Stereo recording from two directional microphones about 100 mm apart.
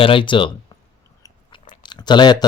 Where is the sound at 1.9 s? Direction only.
50° left (ahead or behind).